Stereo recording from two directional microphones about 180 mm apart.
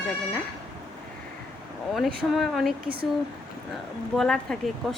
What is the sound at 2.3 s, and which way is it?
Speech, centre (ahead or behind).